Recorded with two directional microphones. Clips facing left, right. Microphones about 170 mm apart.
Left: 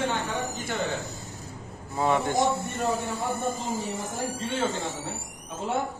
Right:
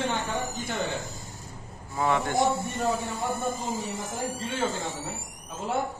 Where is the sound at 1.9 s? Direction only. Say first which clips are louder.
Left 1 dB; 20° left (ahead or behind).